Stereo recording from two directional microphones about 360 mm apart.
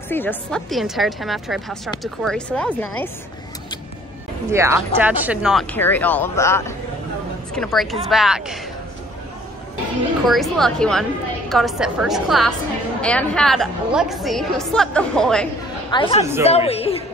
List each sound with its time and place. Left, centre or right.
0.1 s a woman's voice: centre
4.5 s a woman's voice: centre
10.2 s a woman's voice: centre
15.9 s a woman's voice: centre